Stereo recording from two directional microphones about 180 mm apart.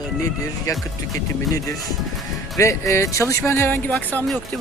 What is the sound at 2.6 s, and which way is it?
Speech, 15° left (ahead or behind).